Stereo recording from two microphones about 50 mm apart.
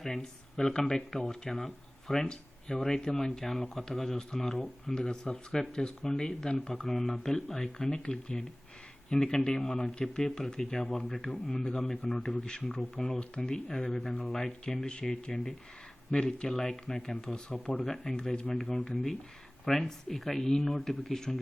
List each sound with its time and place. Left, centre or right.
0.0 s speech: centre
4.9 s speech: centre